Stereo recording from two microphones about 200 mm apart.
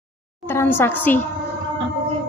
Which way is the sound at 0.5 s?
10° left (ahead or behind).